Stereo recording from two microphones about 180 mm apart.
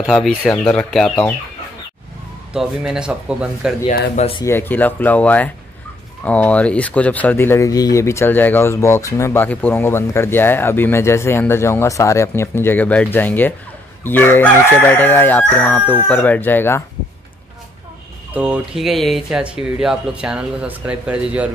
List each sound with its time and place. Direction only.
0.1 s speech: centre (ahead or behind)
2.5 s speech: 5° right (ahead or behind)
4.2 s speech: 30° left (ahead or behind)
4.5 s speech: 10° left (ahead or behind)
18.3 s speech: 5° right (ahead or behind)